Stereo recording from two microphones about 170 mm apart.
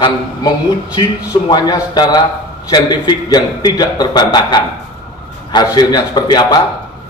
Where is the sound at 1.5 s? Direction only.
25° left (ahead or behind).